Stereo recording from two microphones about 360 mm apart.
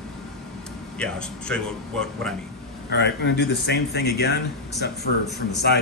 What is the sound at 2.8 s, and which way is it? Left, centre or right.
A man's voice, left.